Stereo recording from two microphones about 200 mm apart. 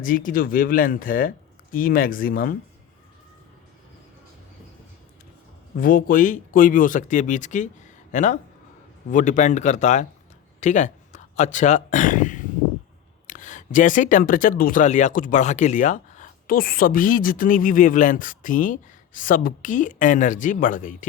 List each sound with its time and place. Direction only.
0.0 s speech: 45° left (ahead or behind)
5.7 s speech: 45° left (ahead or behind)